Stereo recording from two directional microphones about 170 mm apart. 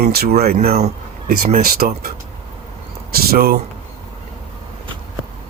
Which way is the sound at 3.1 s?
65° right (ahead or behind).